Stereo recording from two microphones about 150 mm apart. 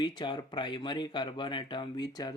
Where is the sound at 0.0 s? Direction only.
30° left (ahead or behind).